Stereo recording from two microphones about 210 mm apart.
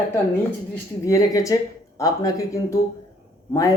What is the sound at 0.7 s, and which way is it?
Speech, 15° left (ahead or behind).